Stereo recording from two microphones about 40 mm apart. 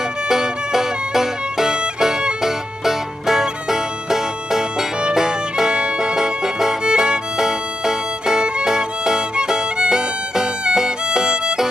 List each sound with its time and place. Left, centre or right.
0.3 s music: centre
6.8 s violin: centre
9.4 s violin: right
9.8 s violin: centre